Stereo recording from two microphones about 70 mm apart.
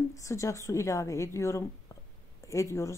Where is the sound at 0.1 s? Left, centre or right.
Left.